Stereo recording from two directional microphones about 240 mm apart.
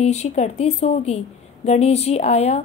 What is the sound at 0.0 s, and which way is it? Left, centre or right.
Speech, left.